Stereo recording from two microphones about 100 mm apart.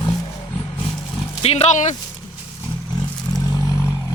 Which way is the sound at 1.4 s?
90° left.